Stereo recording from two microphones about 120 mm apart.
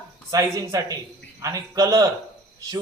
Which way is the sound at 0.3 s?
30° right (ahead or behind).